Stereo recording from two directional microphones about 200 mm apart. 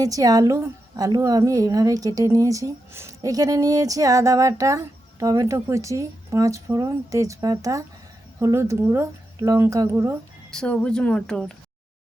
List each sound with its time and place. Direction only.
0.0 s a woman's voice: 15° right (ahead or behind)
10.5 s speech: 5° left (ahead or behind)